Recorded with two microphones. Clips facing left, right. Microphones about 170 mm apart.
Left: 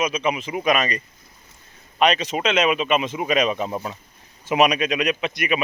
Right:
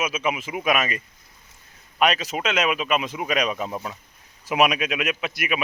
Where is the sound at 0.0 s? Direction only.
5° right (ahead or behind).